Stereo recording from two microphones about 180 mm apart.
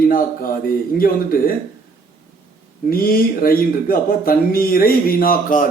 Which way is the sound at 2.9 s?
55° left (ahead or behind).